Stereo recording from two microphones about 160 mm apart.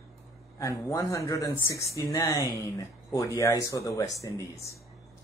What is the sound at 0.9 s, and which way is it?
Speech, 20° left (ahead or behind).